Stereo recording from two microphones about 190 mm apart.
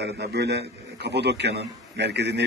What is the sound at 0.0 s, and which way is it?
A man's voice, 60° right (ahead or behind).